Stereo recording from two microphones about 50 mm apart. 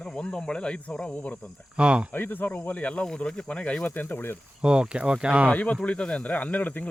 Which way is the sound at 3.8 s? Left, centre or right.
Left.